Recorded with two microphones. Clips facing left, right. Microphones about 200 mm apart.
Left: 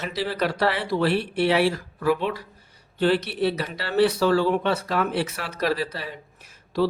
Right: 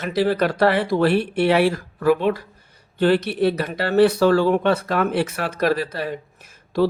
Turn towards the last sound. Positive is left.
turn(degrees=-50)  # may be behind; listen again after turning